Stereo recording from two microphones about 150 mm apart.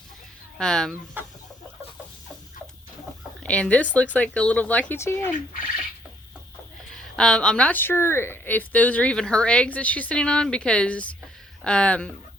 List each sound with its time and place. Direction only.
0.6 s speech: 5° left (ahead or behind)
1.2 s chicken: 10° right (ahead or behind)
3.4 s a woman's voice: 10° left (ahead or behind)
6.9 s a woman's voice: 5° left (ahead or behind)